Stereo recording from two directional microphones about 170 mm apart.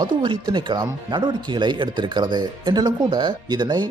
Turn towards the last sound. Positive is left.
turn(degrees=-25)  # may be behind; listen again after turning